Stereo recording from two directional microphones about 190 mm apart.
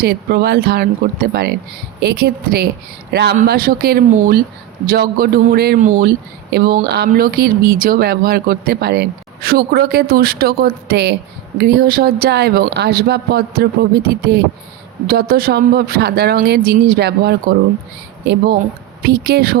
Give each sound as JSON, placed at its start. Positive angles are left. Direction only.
{"t": 0.0, "sound": "speech", "side_deg": -55}
{"t": 15.0, "sound": "speech", "side_deg": -50}